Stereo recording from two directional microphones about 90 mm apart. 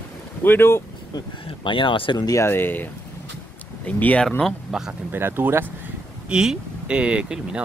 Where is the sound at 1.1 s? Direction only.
65° left (ahead or behind).